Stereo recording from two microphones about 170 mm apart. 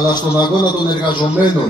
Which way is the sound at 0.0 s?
25° left (ahead or behind).